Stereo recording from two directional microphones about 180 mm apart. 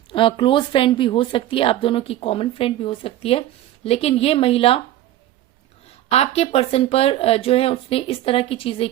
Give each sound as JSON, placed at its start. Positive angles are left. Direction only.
{"t": 0.1, "sound": "speech", "side_deg": 30}
{"t": 6.1, "sound": "speech", "side_deg": 35}